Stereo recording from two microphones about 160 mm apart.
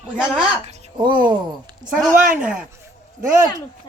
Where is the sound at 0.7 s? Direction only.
45° right (ahead or behind).